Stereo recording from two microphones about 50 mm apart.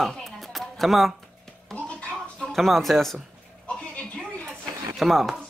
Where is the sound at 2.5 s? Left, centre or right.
Centre.